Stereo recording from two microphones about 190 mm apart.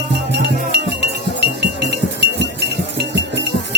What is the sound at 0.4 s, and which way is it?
Music, 60° right (ahead or behind).